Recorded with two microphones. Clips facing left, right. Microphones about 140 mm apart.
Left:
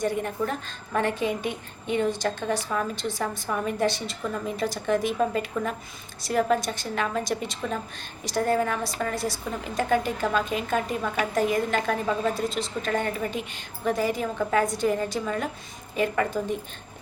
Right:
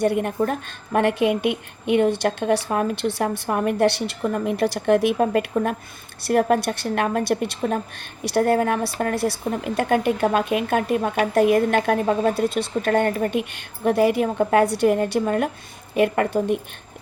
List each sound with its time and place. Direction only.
0.0 s a woman's voice: 60° right (ahead or behind)